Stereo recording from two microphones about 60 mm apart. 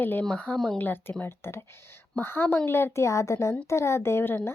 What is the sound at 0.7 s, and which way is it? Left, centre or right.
A woman's voice, left.